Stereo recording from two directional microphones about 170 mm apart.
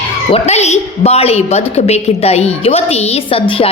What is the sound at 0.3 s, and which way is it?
A woman's voice, 35° left (ahead or behind).